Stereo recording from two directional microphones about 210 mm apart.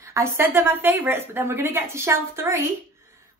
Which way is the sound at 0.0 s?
15° right (ahead or behind).